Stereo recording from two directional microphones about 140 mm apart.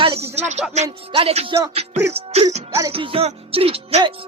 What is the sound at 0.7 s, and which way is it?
Speech, 45° right (ahead or behind).